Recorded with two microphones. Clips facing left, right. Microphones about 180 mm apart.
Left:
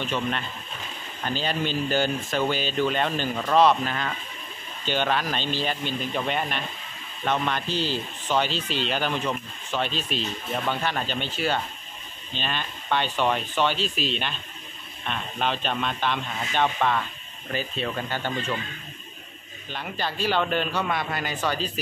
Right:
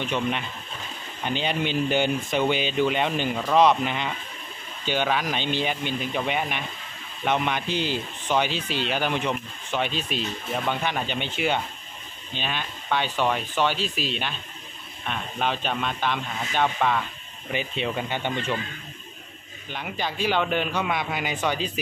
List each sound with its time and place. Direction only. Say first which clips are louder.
0.0 s speech: right 1 dB; 15° right (ahead or behind)
17.5 s speech: right 1 dB; 15° right (ahead or behind)
19.7 s speech: even; 15° right (ahead or behind)